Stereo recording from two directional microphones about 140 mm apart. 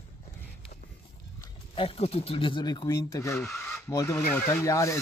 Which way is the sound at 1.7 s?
40° left (ahead or behind).